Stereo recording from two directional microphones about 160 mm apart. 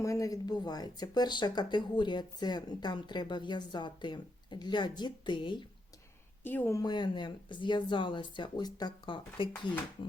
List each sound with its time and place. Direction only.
0.0 s speech: 20° left (ahead or behind)
6.4 s speech: 10° left (ahead or behind); by 9.5 s 30° left (ahead or behind)